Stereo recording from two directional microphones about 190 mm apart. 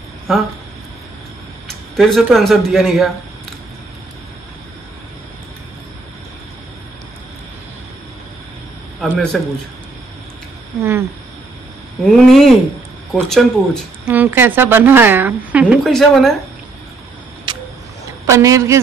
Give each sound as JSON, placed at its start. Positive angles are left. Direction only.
{"t": 0.3, "sound": "speech", "side_deg": 0}
{"t": 1.7, "sound": "speech", "side_deg": 0}
{"t": 9.3, "sound": "speech", "side_deg": 0}
{"t": 10.8, "sound": "speech", "side_deg": -15}
{"t": 12.0, "sound": "speech", "side_deg": 0}
{"t": 18.2, "sound": "a woman's voice", "side_deg": -15}